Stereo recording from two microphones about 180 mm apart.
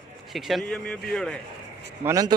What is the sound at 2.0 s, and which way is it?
Speech, 20° right (ahead or behind).